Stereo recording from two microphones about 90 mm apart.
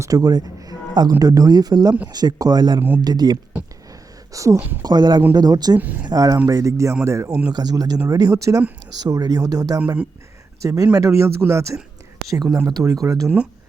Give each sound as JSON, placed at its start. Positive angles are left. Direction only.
{"t": 0.0, "sound": "speech", "side_deg": -40}
{"t": 4.3, "sound": "speech", "side_deg": -35}
{"t": 4.5, "sound": "speech", "side_deg": -20}
{"t": 4.8, "sound": "speech", "side_deg": -50}
{"t": 5.8, "sound": "speech", "side_deg": -20}
{"t": 6.1, "sound": "speech", "side_deg": -40}
{"t": 7.5, "sound": "speech", "side_deg": -50}
{"t": 12.3, "sound": "speech", "side_deg": -45}